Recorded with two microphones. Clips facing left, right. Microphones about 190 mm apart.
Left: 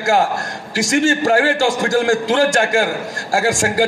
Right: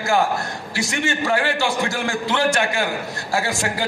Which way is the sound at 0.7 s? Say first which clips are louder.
Left 9 dB; 40° left (ahead or behind).